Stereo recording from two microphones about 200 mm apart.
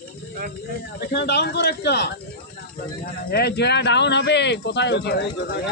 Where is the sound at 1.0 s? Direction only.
55° left (ahead or behind).